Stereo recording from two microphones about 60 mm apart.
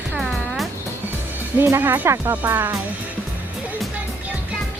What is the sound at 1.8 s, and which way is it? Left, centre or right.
Speech, right.